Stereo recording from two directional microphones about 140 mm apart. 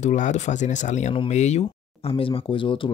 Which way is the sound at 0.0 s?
60° left (ahead or behind).